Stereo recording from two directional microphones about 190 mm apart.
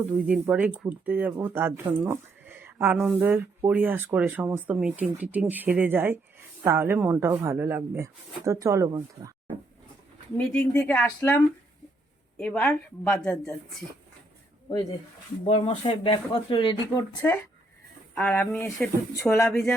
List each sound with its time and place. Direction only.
0.0 s speech: 5° right (ahead or behind)
10.3 s a woman's voice: 5° left (ahead or behind)
15.4 s speech: 35° left (ahead or behind)
18.1 s speech: 10° left (ahead or behind)